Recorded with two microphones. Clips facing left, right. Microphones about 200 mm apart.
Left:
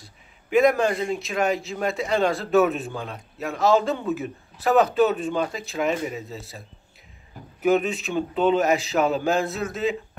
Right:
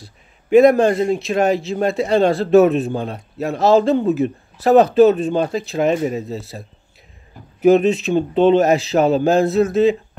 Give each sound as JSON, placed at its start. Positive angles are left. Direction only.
{"t": 0.5, "sound": "a man's voice", "side_deg": -35}
{"t": 7.6, "sound": "a man's voice", "side_deg": -25}